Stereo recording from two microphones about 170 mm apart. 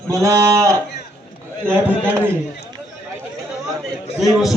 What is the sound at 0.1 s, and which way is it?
A man's voice, 20° right (ahead or behind).